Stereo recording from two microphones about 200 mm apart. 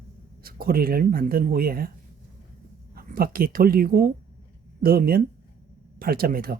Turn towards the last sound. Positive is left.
turn(degrees=-45)  # may be behind; listen again after turning